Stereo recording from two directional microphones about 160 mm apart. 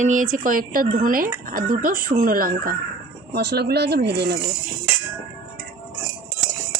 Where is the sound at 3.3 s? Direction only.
90° right.